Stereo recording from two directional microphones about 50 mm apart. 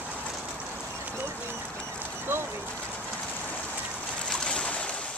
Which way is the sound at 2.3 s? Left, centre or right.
Right.